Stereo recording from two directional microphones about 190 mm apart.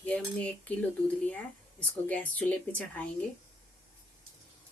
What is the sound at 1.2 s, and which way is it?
Speech, 5° left (ahead or behind).